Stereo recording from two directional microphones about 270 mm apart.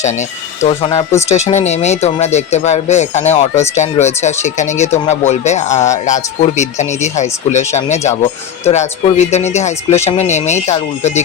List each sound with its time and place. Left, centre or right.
0.0 s speech: left